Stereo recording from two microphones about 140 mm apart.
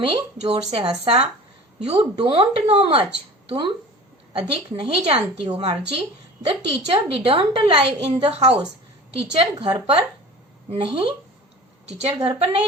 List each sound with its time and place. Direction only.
0.0 s a woman's voice: 40° right (ahead or behind)
4.3 s a woman's voice: 40° right (ahead or behind)